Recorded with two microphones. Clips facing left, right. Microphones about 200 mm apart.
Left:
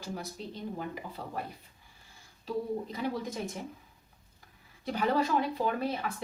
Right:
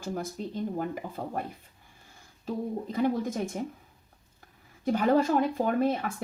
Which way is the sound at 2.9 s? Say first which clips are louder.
Right 7 dB; 50° right (ahead or behind).